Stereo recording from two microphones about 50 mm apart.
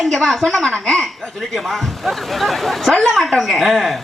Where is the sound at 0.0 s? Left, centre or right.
Centre.